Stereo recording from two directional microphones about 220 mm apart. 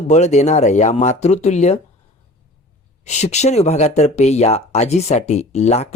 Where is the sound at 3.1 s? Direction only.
30° left (ahead or behind).